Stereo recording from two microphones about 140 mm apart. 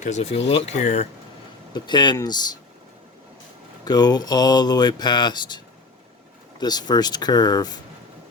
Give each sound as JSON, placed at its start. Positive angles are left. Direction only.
{"t": 0.0, "sound": "speech", "side_deg": 50}
{"t": 1.7, "sound": "speech", "side_deg": 30}
{"t": 3.8, "sound": "speech", "side_deg": 30}